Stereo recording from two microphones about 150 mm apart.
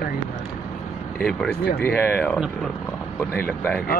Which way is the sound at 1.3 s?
5° left (ahead or behind).